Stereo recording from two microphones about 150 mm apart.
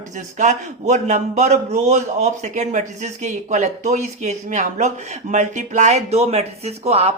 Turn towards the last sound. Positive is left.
turn(degrees=-45)  # may be behind; listen again after turning